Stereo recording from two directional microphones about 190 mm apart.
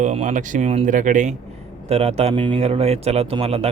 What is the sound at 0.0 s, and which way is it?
Speech, 40° right (ahead or behind).